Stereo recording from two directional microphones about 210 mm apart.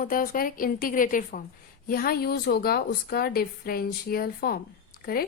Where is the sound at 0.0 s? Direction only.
40° left (ahead or behind).